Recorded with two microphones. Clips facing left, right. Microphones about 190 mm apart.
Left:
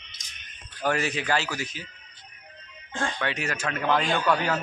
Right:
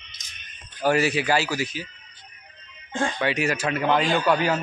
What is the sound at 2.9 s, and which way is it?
Speech, 15° right (ahead or behind).